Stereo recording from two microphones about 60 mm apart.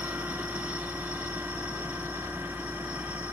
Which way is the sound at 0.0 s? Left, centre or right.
Right.